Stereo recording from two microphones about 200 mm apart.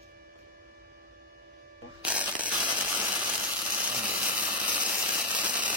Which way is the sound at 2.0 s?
5° right (ahead or behind).